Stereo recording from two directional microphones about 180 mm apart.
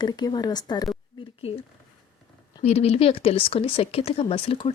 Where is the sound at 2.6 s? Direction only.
35° left (ahead or behind).